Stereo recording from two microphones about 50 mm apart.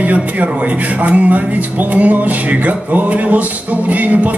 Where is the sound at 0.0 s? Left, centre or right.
Right.